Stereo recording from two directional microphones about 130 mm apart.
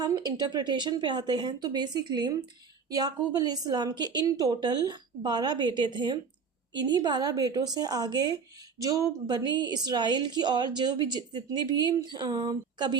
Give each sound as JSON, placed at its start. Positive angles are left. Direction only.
{"t": 0.0, "sound": "a woman's voice", "side_deg": -30}